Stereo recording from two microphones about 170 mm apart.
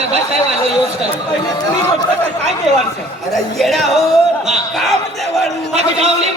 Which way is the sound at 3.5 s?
Centre (ahead or behind).